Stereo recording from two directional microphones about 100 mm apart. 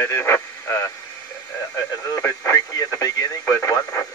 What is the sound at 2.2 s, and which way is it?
Radio, 35° left (ahead or behind).